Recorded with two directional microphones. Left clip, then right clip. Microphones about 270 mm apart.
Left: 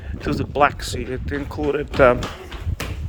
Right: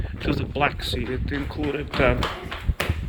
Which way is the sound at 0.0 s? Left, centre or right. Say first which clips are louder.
Left 2 dB; centre.